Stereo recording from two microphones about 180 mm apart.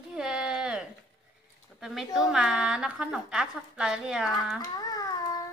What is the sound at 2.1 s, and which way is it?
A woman's voice, centre (ahead or behind).